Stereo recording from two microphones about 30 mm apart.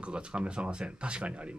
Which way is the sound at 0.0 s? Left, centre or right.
Right.